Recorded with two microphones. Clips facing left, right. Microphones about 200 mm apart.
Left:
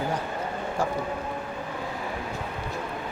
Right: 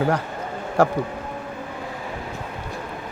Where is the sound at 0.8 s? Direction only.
70° right (ahead or behind).